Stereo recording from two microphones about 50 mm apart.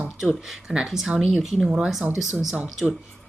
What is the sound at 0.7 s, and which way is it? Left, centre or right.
Speech, centre.